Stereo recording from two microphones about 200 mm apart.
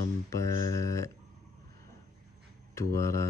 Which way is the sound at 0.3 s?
15° left (ahead or behind).